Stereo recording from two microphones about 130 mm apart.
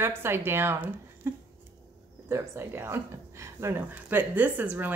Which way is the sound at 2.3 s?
20° right (ahead or behind).